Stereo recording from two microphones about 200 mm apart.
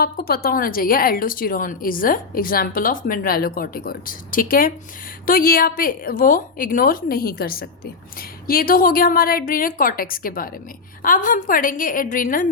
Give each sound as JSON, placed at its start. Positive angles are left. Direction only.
{"t": 0.0, "sound": "a woman's voice", "side_deg": 50}